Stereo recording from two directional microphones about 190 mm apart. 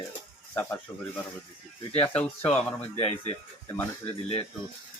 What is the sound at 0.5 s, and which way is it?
Speech, 10° left (ahead or behind).